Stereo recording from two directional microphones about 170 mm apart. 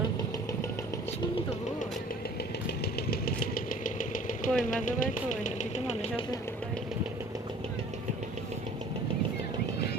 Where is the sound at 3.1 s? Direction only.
65° left (ahead or behind).